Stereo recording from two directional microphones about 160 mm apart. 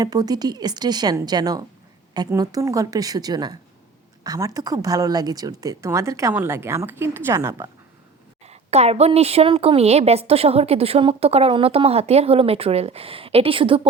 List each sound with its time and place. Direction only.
0.0 s speech: 25° right (ahead or behind)
8.4 s a woman's voice: 40° right (ahead or behind)